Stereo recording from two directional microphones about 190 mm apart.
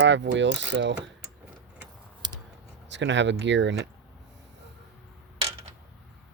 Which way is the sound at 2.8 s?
70° right (ahead or behind).